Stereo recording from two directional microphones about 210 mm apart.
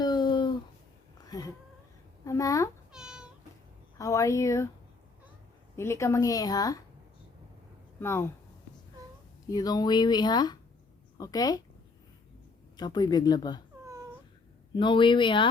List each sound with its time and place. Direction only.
0.0 s a sound: 20° left (ahead or behind)
1.2 s cat: 15° left (ahead or behind)
2.2 s a woman's voice: 15° left (ahead or behind)
2.9 s cat: 5° right (ahead or behind)
3.9 s speech: 15° left (ahead or behind)
5.7 s speech: 10° left (ahead or behind)
7.9 s speech: 10° left (ahead or behind)
9.5 s speech: 20° left (ahead or behind)
12.7 s speech: 20° left (ahead or behind)
13.8 s a sound: 15° right (ahead or behind)
14.8 s speech: 25° left (ahead or behind)